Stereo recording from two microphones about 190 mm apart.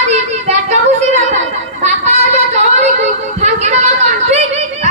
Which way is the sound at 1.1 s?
35° right (ahead or behind).